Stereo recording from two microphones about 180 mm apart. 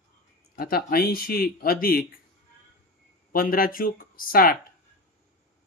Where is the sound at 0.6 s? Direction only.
55° left (ahead or behind).